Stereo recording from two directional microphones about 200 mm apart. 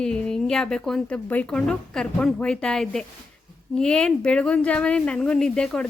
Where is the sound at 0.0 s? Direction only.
5° left (ahead or behind).